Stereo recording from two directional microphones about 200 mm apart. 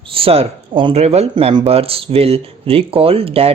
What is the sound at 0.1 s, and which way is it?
Speech, 30° right (ahead or behind).